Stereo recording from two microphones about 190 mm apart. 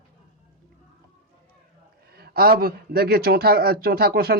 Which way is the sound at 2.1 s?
55° right (ahead or behind).